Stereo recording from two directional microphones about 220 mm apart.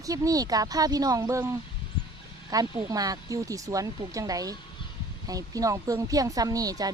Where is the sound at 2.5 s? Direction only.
15° right (ahead or behind).